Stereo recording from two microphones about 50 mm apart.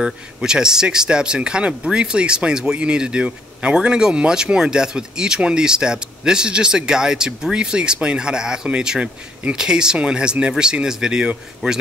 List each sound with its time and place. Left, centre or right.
0.0 s speech: centre